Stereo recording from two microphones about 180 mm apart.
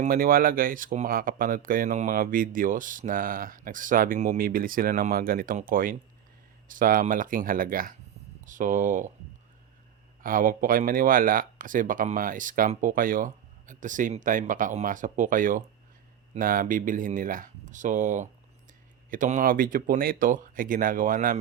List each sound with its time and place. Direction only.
0.0 s speech: 55° right (ahead or behind)
10.2 s speech: 50° right (ahead or behind)